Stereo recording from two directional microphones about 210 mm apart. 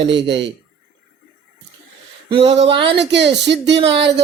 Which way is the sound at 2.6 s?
25° right (ahead or behind).